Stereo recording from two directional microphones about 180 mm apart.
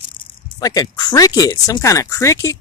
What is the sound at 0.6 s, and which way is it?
Speech, 20° left (ahead or behind).